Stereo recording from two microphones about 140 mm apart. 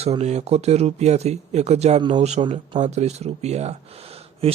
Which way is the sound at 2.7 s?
55° right (ahead or behind).